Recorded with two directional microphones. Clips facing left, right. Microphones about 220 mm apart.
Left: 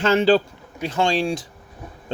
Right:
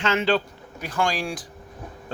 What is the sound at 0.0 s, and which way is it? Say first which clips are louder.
Speech: left 6 dB; 35° left (ahead or behind).